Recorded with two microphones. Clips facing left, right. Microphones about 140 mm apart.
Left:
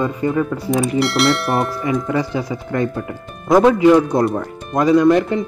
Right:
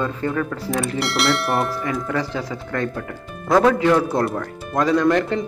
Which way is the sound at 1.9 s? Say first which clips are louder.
Left 5 dB; 10° left (ahead or behind).